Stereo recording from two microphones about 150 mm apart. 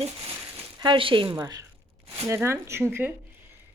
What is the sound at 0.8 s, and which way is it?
A woman's voice, 35° right (ahead or behind).